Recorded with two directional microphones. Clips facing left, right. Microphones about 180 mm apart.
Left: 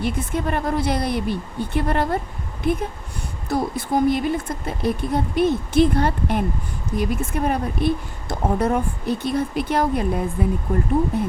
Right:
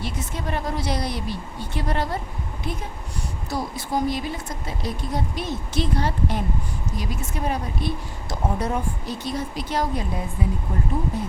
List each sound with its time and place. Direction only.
0.0 s a woman's voice: 55° left (ahead or behind)
3.5 s a woman's voice: 55° left (ahead or behind)